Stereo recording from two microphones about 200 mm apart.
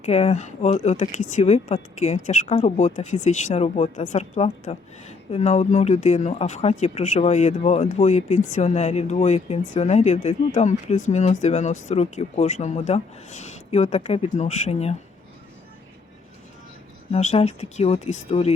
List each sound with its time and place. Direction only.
0.0 s speech: 35° left (ahead or behind)
17.1 s speech: 30° left (ahead or behind)